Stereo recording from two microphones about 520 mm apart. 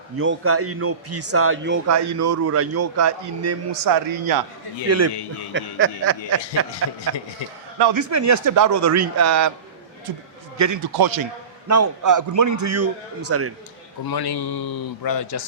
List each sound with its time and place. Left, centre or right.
0.2 s a man's voice: right
4.9 s a man's voice: right
5.1 s a man's voice: left
5.5 s a man's voice: right
7.8 s a man's voice: right
8.1 s speech: right
10.6 s a man's voice: right
14.1 s a man's voice: left